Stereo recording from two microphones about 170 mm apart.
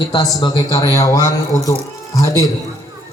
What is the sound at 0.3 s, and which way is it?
A man's voice, 20° left (ahead or behind).